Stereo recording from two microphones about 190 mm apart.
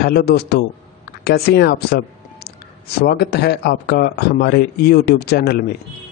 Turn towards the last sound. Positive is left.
turn(degrees=55)  # may be behind; listen again after turning